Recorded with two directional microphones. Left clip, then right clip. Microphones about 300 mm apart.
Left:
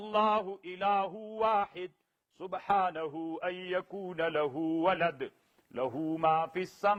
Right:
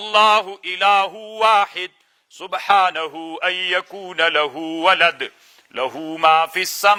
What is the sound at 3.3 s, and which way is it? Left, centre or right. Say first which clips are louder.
Mantra: right 17 dB; centre.